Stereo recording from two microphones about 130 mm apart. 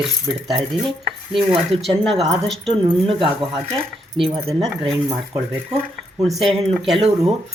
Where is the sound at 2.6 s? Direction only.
45° right (ahead or behind).